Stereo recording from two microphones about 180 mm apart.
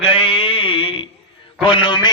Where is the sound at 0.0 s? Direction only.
30° left (ahead or behind).